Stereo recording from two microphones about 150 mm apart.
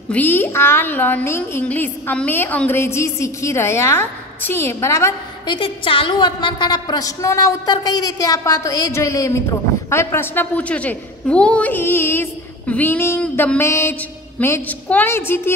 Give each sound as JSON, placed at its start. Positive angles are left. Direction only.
{"t": 0.1, "sound": "a woman's voice", "side_deg": 10}
{"t": 5.5, "sound": "a woman's voice", "side_deg": 35}